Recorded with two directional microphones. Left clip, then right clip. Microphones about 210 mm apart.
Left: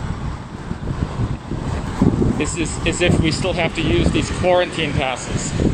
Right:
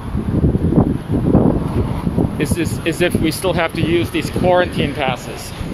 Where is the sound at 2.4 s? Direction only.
20° right (ahead or behind).